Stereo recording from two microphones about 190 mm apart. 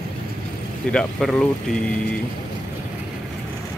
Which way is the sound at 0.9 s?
5° left (ahead or behind).